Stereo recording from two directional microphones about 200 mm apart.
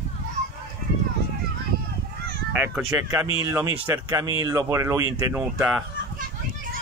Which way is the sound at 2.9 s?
10° right (ahead or behind).